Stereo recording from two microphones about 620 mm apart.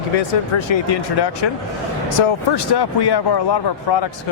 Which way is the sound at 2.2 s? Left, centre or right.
Left.